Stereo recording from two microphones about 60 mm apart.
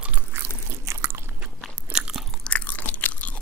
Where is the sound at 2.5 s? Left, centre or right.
Left.